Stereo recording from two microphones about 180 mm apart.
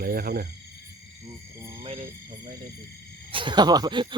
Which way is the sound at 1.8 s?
30° right (ahead or behind).